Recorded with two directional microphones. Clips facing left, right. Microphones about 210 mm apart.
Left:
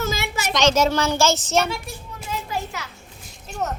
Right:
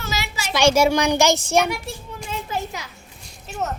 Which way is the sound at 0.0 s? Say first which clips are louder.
Left 4 dB; 50° left (ahead or behind).